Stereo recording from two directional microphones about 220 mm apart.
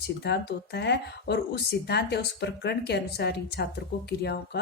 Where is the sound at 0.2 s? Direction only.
50° left (ahead or behind).